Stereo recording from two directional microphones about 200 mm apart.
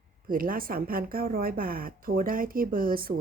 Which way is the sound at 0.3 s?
45° right (ahead or behind).